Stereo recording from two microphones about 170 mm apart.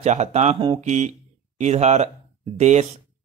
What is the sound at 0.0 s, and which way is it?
Speech, 40° right (ahead or behind).